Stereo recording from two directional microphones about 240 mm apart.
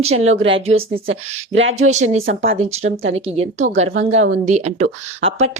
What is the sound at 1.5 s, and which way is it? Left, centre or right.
Speech, right.